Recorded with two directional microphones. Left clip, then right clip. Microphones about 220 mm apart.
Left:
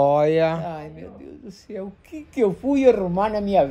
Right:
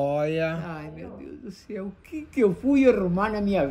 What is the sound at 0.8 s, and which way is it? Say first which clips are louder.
Speech: left 1 dB; centre (ahead or behind).